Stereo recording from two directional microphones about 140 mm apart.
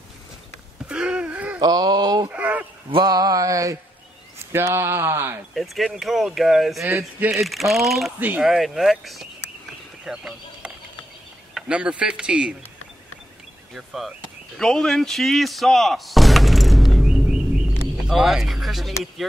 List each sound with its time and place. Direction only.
0.8 s wail: 10° right (ahead or behind)
1.6 s a sound: 30° right (ahead or behind)
2.3 s speech: 10° right (ahead or behind)
2.9 s a sound: 30° right (ahead or behind)
4.5 s speech: 20° right (ahead or behind)
5.5 s speech: centre (ahead or behind)
6.8 s speech: 15° right (ahead or behind)
7.3 s speech: centre (ahead or behind)
13.7 s speech: centre (ahead or behind)